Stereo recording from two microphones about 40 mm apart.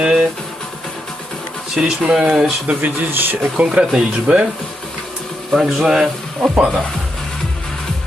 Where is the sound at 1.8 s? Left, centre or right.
Centre.